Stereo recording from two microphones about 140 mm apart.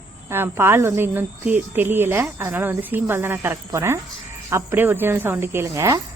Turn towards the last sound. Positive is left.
turn(degrees=-25)  # may be behind; listen again after turning